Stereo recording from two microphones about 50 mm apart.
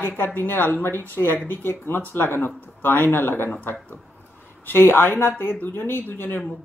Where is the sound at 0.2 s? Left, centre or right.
Left.